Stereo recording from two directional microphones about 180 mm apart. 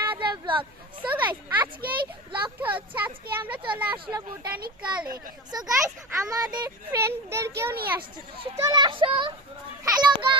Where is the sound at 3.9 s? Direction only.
25° right (ahead or behind).